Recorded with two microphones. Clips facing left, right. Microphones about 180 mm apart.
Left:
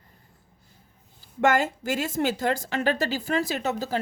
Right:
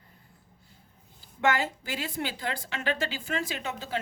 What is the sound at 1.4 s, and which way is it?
A woman's voice, 45° left (ahead or behind).